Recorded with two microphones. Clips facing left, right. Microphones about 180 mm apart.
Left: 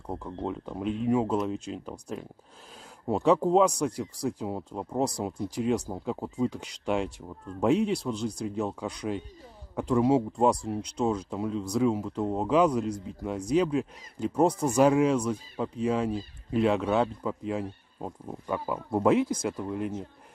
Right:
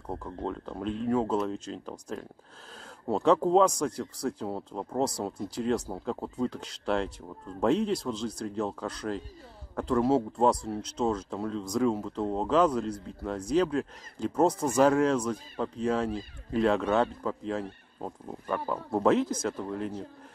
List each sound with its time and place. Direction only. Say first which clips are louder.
0.0 s speech: left 1 dB; 10° left (ahead or behind)